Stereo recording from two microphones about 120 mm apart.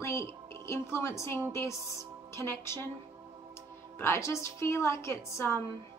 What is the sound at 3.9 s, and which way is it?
A woman's voice, 20° left (ahead or behind).